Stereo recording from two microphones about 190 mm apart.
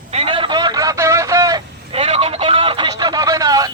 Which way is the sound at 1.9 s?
30° right (ahead or behind).